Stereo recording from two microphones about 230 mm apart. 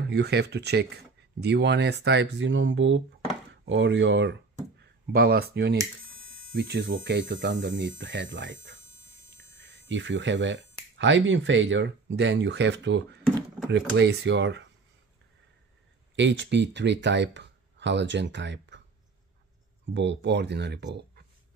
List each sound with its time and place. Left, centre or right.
0.1 s speech: right
16.2 s speech: right
19.9 s speech: right